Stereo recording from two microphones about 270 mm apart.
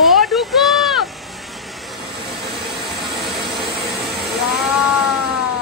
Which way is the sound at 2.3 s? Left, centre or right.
Centre.